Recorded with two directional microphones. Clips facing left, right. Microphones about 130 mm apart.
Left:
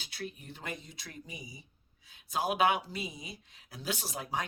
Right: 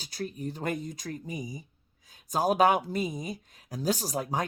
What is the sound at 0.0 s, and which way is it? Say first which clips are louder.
Speech: right 8 dB; 40° right (ahead or behind).